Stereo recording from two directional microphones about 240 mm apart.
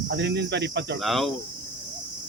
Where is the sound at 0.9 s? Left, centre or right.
Centre.